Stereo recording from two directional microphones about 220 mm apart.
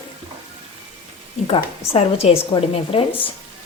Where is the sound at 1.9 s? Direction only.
30° left (ahead or behind).